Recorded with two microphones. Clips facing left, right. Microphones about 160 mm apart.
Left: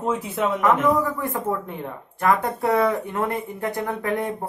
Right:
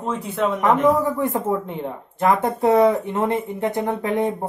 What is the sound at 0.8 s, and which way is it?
Speech, 25° right (ahead or behind).